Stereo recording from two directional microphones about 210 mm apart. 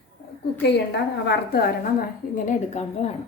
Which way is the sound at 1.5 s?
45° left (ahead or behind).